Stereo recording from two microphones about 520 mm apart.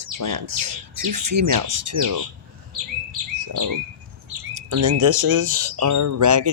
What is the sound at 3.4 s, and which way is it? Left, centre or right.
Bird, right.